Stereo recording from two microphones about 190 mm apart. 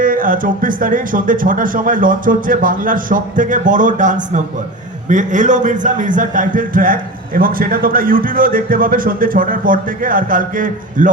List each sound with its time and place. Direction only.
0.0 s a man's voice: 45° right (ahead or behind)